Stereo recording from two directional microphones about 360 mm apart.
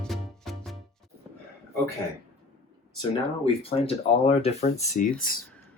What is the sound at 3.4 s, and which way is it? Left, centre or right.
Speech, centre.